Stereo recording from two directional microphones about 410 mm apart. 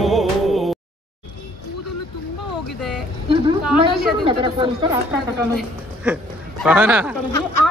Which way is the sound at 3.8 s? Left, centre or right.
Centre.